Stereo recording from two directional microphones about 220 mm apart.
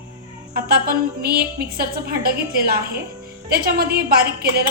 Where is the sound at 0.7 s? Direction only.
45° right (ahead or behind).